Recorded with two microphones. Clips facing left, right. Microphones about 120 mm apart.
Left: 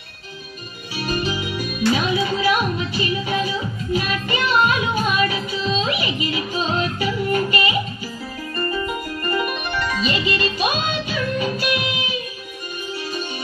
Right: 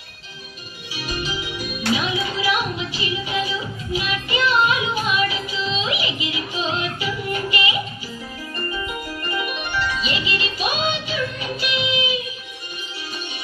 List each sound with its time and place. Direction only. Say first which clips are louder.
0.9 s music: left 5 dB; 45° left (ahead or behind)
8.8 s music: left 4 dB; 45° left (ahead or behind)